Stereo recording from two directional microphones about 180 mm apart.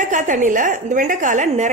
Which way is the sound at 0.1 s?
40° right (ahead or behind).